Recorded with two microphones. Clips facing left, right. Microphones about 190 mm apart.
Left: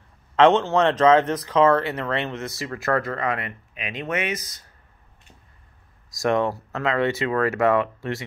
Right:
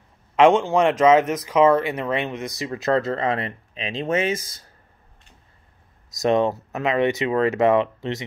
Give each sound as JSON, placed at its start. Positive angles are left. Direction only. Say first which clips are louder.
{"t": 0.4, "sound": "speech", "louder": "right 1 dB", "side_deg": -10}
{"t": 6.1, "sound": "speech", "louder": "right 2 dB", "side_deg": -20}